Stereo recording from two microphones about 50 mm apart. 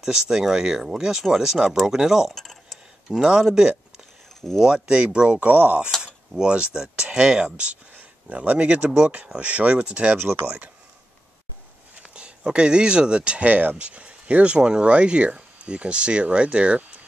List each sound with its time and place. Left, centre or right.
0.0 s speech: centre
2.3 s a sound: centre
3.1 s speech: centre
5.5 s speech: right
6.0 s speech: centre
7.9 s a sound: right
8.4 s speech: right
10.1 s speech: right
12.1 s speech: right